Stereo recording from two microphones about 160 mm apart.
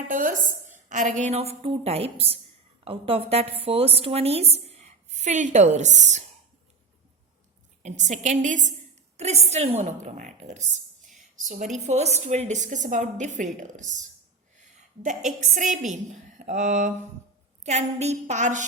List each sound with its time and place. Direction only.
0.1 s a woman's voice: 55° right (ahead or behind)
7.8 s a woman's voice: 50° right (ahead or behind)
15.5 s a woman's voice: 50° right (ahead or behind)